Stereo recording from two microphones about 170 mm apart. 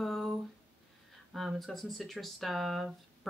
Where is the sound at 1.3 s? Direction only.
Centre (ahead or behind).